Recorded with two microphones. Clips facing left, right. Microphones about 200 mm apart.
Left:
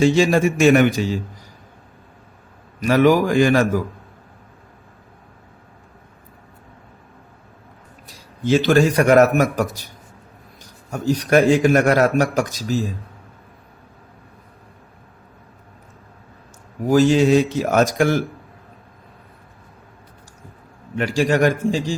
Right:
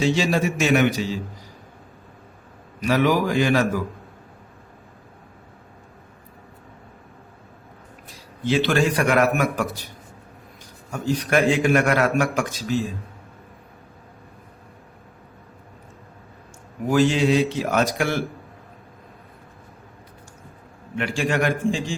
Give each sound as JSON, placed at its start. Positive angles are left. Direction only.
{"t": 0.0, "sound": "a man's voice", "side_deg": 50}
{"t": 2.8, "sound": "a man's voice", "side_deg": 45}
{"t": 8.4, "sound": "a man's voice", "side_deg": 40}
{"t": 10.9, "sound": "a man's voice", "side_deg": 40}
{"t": 16.9, "sound": "a man's voice", "side_deg": 40}
{"t": 20.9, "sound": "a man's voice", "side_deg": 40}